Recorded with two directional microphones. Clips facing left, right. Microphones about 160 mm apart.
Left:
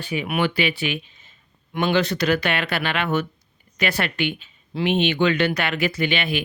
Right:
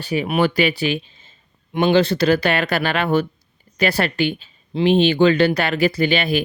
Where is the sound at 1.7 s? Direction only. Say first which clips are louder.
Right 5 dB; 25° right (ahead or behind).